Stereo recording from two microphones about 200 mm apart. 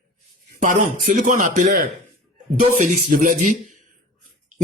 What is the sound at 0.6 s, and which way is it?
A man's voice, 40° right (ahead or behind).